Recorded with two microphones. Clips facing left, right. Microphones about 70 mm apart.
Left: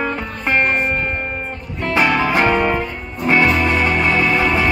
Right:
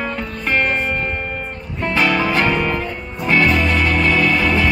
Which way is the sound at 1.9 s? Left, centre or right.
Left.